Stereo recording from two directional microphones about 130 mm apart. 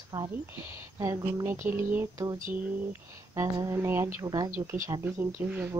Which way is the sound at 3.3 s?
25° right (ahead or behind).